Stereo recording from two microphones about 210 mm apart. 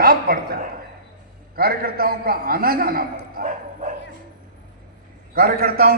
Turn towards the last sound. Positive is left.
turn(degrees=-45)  # may be behind; listen again after turning